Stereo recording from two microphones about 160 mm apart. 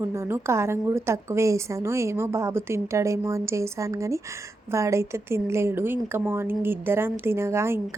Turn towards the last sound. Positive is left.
turn(degrees=-15)  # may be behind; listen again after turning